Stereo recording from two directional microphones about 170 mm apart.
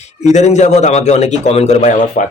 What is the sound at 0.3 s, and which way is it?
A man's voice, 45° left (ahead or behind).